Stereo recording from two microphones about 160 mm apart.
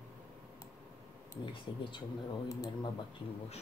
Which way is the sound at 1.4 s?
30° left (ahead or behind).